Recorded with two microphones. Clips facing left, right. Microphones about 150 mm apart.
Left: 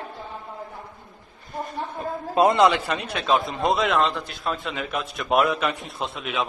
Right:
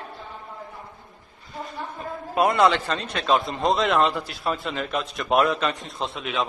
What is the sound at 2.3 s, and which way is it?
Speech, 20° left (ahead or behind).